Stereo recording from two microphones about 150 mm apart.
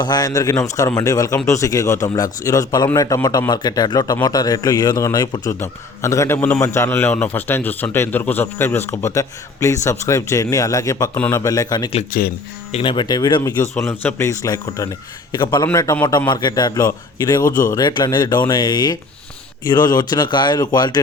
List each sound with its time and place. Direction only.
0.0 s a man's voice: 25° left (ahead or behind)
12.1 s speech: 70° left (ahead or behind)
12.7 s a man's voice: 35° left (ahead or behind)
17.4 s a man's voice: 65° left (ahead or behind)
17.7 s a man's voice: 25° left (ahead or behind)